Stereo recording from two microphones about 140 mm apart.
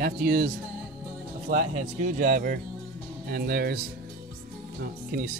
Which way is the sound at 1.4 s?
70° right (ahead or behind).